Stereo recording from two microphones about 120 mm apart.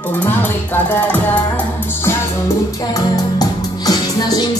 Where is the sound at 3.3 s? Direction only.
30° left (ahead or behind).